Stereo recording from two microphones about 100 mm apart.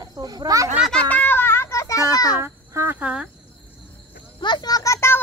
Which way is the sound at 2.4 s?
25° right (ahead or behind).